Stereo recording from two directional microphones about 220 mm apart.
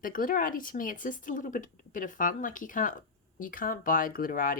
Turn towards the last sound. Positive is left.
turn(degrees=40)  # may be behind; listen again after turning